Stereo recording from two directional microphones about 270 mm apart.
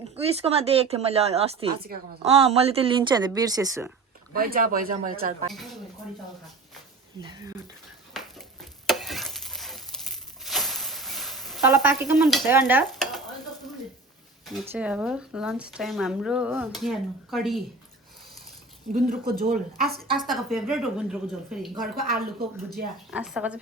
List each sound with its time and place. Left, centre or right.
0.2 s speech: right
4.4 s speech: right
5.5 s speech: centre
7.2 s speech: centre
8.1 s a sound: centre
8.9 s sizzle: centre
14.7 s speech: centre
19.0 s speech: right
20.1 s speech: centre
22.0 s speech: right
23.1 s speech: centre